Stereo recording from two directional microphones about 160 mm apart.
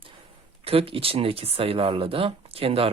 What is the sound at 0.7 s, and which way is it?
Speech, 35° right (ahead or behind).